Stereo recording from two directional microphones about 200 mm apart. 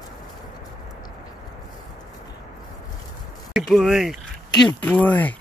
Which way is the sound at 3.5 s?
Centre (ahead or behind).